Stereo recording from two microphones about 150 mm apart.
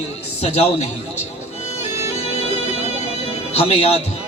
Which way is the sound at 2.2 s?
40° left (ahead or behind).